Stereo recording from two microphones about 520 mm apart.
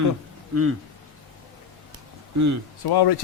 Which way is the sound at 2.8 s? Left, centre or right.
Left.